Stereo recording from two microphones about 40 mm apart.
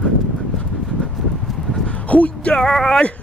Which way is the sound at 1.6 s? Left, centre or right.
Centre.